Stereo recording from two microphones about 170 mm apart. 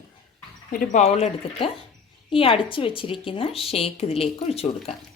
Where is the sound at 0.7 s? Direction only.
45° left (ahead or behind).